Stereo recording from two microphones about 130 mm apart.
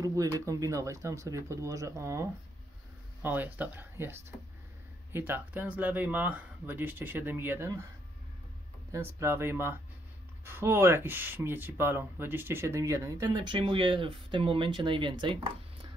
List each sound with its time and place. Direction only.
0.0 s speech: 25° right (ahead or behind)
8.9 s speech: 20° right (ahead or behind); by 15.3 s 40° right (ahead or behind)